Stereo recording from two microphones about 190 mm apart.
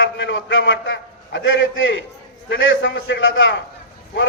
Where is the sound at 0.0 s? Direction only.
80° left.